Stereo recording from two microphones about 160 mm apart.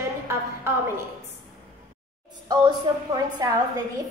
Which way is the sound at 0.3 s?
15° right (ahead or behind).